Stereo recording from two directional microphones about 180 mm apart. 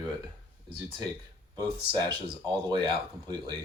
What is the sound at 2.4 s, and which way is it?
Speech, 25° right (ahead or behind).